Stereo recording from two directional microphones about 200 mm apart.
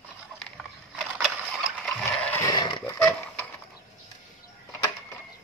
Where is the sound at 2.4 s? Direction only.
20° left (ahead or behind).